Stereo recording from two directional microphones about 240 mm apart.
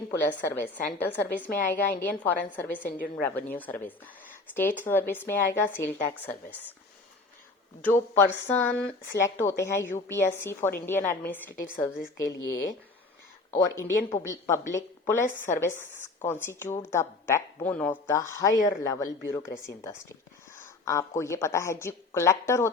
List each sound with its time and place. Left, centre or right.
0.1 s speech: centre
7.8 s speech: centre
12.4 s speech: left
13.6 s speech: centre
20.6 s a sound: centre
21.2 s speech: centre